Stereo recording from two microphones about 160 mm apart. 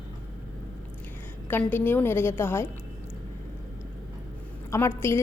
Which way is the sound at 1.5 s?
10° left (ahead or behind).